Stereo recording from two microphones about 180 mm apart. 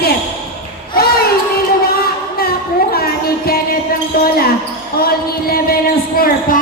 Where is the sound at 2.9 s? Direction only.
60° left (ahead or behind).